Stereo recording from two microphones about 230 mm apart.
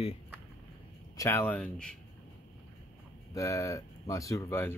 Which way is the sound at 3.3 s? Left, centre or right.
Centre.